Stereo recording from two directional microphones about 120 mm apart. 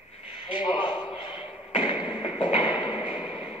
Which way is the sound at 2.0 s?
40° left (ahead or behind).